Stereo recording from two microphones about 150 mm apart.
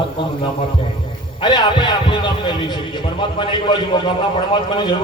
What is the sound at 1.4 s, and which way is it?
A man's voice, 30° left (ahead or behind).